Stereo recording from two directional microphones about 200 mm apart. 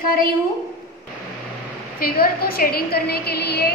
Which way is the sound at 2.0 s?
50° left (ahead or behind).